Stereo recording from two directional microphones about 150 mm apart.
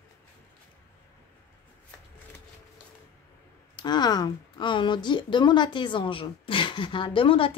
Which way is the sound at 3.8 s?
30° left (ahead or behind).